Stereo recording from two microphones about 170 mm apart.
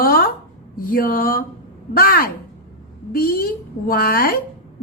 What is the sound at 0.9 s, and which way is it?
A woman's voice, 55° left (ahead or behind).